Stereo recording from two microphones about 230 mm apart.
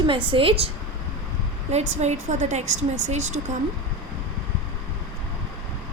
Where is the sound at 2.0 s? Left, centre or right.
Right.